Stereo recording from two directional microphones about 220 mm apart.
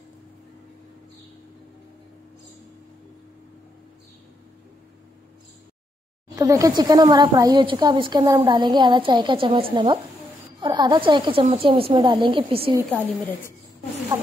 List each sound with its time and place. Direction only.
6.3 s speech: 15° right (ahead or behind)
12.9 s a woman's voice: 10° left (ahead or behind)